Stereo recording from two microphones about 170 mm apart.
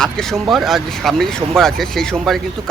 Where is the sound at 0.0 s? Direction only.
5° left (ahead or behind).